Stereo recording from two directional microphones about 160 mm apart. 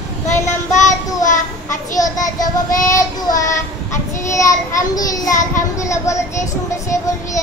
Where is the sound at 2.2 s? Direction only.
20° left (ahead or behind).